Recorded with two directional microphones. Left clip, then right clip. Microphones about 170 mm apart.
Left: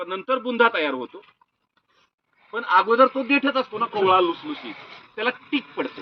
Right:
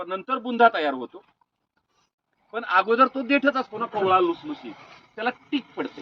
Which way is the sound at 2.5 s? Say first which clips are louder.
Left 3 dB; 30° right (ahead or behind).